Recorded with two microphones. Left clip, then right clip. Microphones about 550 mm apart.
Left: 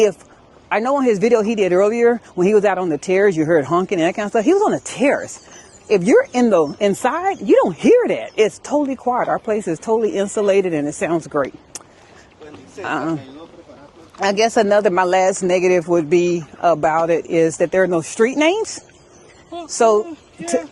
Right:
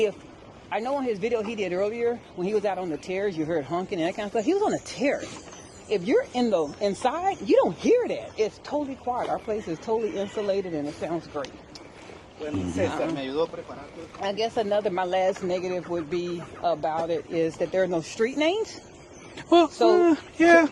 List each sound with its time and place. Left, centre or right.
0.7 s speech: left
3.9 s speech: left
14.2 s speech: left
20.1 s speech: right